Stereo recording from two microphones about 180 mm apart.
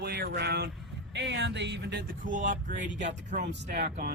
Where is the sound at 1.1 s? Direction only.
75° right (ahead or behind).